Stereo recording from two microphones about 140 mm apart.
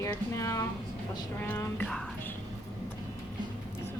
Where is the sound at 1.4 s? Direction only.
10° left (ahead or behind).